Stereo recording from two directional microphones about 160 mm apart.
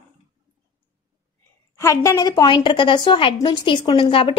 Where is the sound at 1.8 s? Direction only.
20° left (ahead or behind).